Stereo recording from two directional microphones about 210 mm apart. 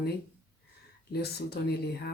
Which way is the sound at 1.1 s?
50° left (ahead or behind).